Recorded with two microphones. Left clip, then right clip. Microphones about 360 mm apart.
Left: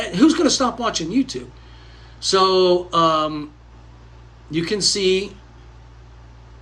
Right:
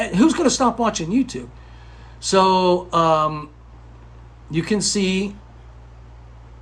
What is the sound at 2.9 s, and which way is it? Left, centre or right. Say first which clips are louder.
Speech: even; centre.